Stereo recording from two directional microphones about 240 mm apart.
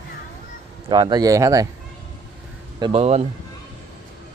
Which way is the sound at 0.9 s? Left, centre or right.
Centre.